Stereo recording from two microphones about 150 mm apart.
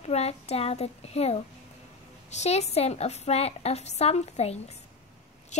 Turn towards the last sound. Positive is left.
turn(degrees=45)  # may be behind; listen again after turning